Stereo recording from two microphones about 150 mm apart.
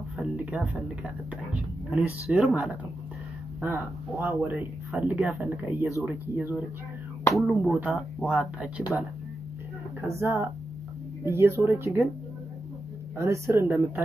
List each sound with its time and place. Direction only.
0.2 s a man's voice: 5° right (ahead or behind)
5.4 s a man's voice: 15° right (ahead or behind)
10.0 s a man's voice: 15° right (ahead or behind)
13.2 s a man's voice: 20° right (ahead or behind)